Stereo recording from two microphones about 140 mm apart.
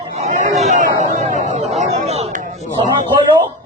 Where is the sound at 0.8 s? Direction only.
55° right (ahead or behind).